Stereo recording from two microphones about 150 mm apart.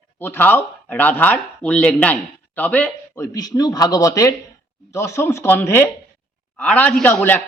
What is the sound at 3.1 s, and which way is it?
A man's voice, 20° left (ahead or behind).